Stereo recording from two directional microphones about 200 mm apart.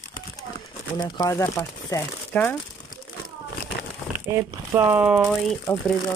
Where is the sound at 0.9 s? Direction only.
20° left (ahead or behind).